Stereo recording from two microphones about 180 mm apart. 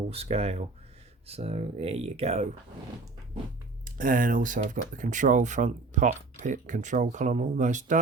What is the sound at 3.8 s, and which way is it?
Speech, 50° right (ahead or behind).